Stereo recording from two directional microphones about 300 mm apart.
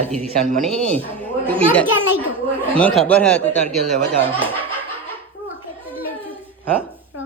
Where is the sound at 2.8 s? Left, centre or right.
Centre.